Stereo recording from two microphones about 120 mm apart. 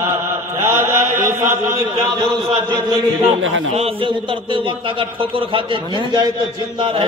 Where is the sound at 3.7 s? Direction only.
50° right (ahead or behind).